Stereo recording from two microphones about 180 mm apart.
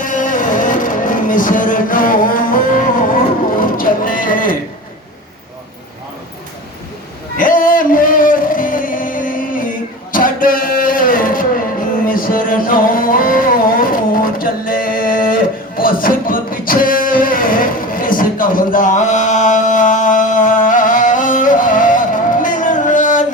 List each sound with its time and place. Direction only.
0.0 s music: 45° left (ahead or behind)
3.6 s music: 50° left (ahead or behind)
7.3 s a sound: 50° left (ahead or behind)